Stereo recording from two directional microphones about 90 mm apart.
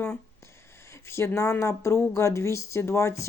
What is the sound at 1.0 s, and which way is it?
Speech, 30° left (ahead or behind).